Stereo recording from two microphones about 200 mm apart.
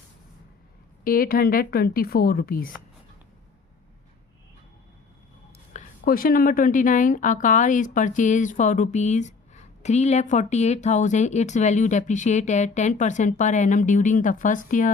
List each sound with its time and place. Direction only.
1.0 s a woman's voice: 45° left (ahead or behind)
5.7 s speech: 45° left (ahead or behind)